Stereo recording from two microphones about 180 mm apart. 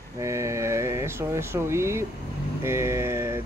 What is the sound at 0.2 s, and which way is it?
Speech, 15° right (ahead or behind).